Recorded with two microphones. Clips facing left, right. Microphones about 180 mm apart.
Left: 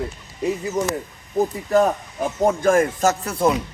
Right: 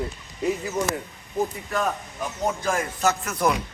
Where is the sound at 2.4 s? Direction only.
50° left (ahead or behind).